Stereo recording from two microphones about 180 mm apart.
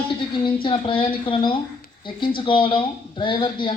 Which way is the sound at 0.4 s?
25° left (ahead or behind).